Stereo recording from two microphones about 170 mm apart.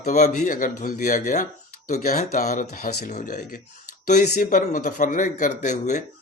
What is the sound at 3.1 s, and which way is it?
Speech, 50° left (ahead or behind).